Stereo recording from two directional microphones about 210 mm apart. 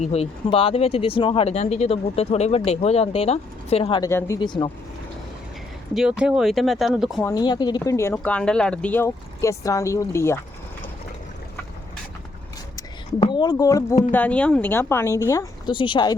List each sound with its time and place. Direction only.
0.0 s speech: 30° left (ahead or behind)
5.9 s speech: 5° right (ahead or behind)
7.3 s speech: 20° left (ahead or behind)
12.7 s speech: 20° left (ahead or behind)